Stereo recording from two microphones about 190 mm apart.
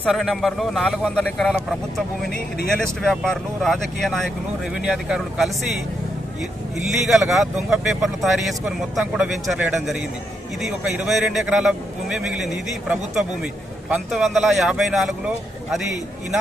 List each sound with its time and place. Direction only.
0.0 s speech: centre (ahead or behind)